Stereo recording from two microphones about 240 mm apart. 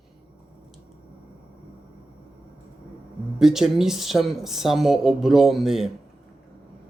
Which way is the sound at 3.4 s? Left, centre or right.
Centre.